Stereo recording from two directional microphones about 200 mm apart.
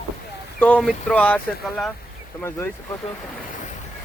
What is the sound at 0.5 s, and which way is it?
Speech, 5° left (ahead or behind).